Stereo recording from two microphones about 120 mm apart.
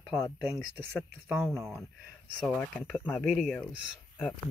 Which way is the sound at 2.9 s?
10° left (ahead or behind).